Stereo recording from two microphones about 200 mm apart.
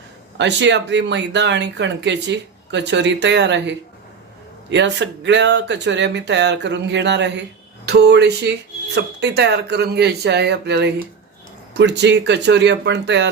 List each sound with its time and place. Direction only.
0.3 s speech: 60° right (ahead or behind)